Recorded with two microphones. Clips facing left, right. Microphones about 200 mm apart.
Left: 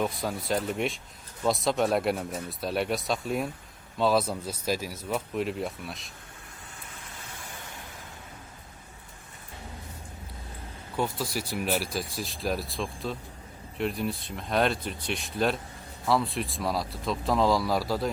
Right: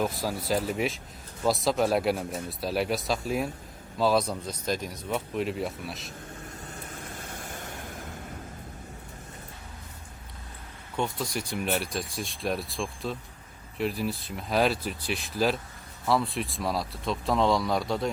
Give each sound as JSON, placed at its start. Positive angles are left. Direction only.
{"t": 0.0, "sound": "speech", "side_deg": 0}
{"t": 7.0, "sound": "a sound", "side_deg": -50}
{"t": 10.9, "sound": "speech", "side_deg": 5}